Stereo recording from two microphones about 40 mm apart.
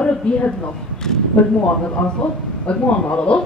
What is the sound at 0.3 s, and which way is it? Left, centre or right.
Speech, left.